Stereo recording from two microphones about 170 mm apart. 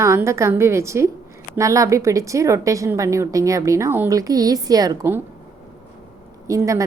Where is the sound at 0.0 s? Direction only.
15° right (ahead or behind).